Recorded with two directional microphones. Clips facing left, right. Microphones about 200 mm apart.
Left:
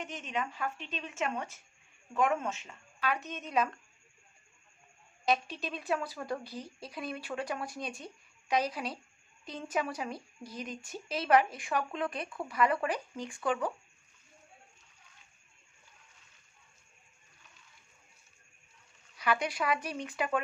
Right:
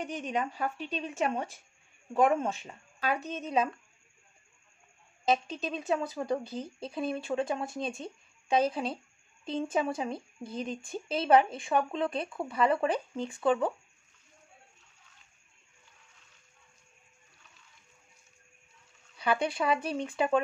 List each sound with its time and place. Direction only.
0.0 s a woman's voice: 35° right (ahead or behind)
5.2 s a woman's voice: 25° right (ahead or behind)
19.1 s speech: 30° right (ahead or behind)